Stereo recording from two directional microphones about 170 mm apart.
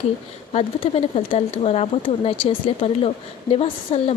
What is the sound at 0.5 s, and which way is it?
Speech, 35° left (ahead or behind).